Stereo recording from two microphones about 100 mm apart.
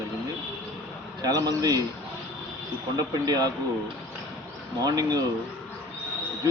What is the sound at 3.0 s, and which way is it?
Speech, 40° right (ahead or behind).